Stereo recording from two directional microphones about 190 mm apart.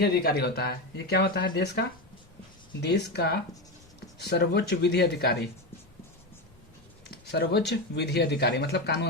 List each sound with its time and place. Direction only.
0.0 s speech: 55° left (ahead or behind)
2.8 s speech: 60° left (ahead or behind)
7.1 s a sound: 60° left (ahead or behind)
7.7 s speech: 60° left (ahead or behind)